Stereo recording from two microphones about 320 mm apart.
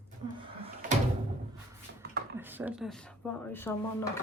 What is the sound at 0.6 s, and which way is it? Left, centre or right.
Door, centre.